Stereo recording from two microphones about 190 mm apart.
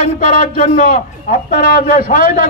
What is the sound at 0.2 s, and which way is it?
A man's voice, 45° left (ahead or behind).